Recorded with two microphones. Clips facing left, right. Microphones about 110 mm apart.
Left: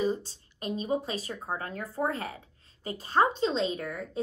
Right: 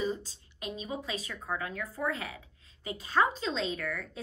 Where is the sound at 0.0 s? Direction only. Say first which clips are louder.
Left 4 dB; 40° left (ahead or behind).